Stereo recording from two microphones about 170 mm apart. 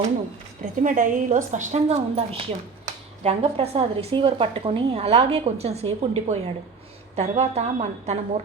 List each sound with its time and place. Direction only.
0.8 s a woman's voice: 50° right (ahead or behind)